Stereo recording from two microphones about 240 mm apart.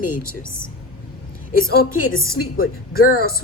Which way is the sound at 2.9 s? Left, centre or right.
Left.